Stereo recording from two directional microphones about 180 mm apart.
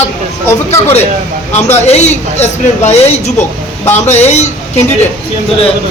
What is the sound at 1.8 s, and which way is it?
A man's voice, 35° left (ahead or behind).